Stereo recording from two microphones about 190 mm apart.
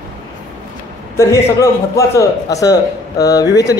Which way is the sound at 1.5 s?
15° left (ahead or behind).